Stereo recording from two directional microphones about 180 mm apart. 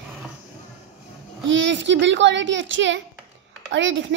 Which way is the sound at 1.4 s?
90° right.